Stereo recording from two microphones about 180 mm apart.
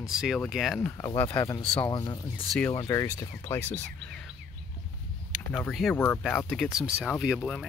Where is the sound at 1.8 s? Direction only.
25° left (ahead or behind).